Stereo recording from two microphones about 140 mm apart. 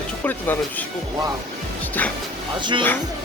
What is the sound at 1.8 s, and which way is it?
Music, 10° left (ahead or behind).